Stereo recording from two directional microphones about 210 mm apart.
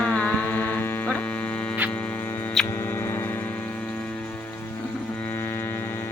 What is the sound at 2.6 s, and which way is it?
Mains hum, 10° left (ahead or behind).